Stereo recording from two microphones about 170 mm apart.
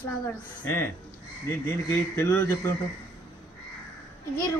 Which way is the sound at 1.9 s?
15° left (ahead or behind).